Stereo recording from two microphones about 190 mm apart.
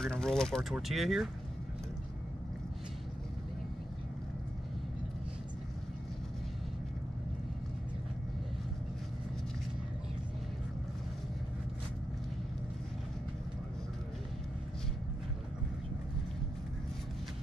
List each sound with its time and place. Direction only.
0.0 s speech: 5° left (ahead or behind)